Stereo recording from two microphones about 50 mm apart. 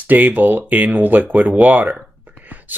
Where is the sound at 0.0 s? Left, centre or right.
Right.